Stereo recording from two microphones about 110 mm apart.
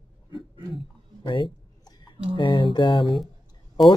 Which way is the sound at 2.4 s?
50° left (ahead or behind).